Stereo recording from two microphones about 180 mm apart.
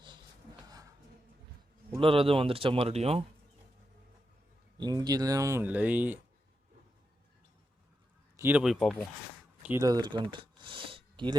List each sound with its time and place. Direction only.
2.0 s speech: 30° right (ahead or behind)
4.8 s speech: 20° right (ahead or behind)
8.4 s speech: 10° right (ahead or behind)
9.6 s speech: 20° right (ahead or behind)